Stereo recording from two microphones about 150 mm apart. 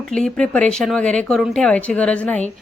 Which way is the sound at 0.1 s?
5° left (ahead or behind).